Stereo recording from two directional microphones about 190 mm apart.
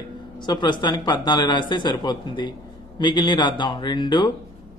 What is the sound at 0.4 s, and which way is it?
A man's voice, 25° left (ahead or behind).